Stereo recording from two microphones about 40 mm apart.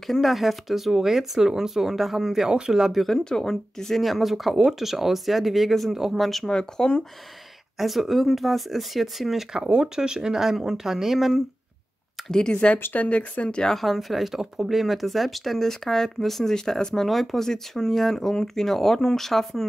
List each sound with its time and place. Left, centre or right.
0.0 s speech: centre
3.3 s speech: centre
6.4 s speech: centre
7.8 s speech: centre
9.7 s speech: right; by 11.4 s centre
12.3 s speech: centre
12.9 s speech: left
13.7 s speech: centre